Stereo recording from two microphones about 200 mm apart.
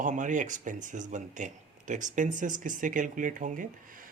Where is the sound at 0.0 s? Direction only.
40° right (ahead or behind).